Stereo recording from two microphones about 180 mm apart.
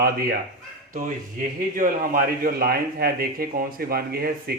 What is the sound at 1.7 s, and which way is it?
Speech, 50° right (ahead or behind).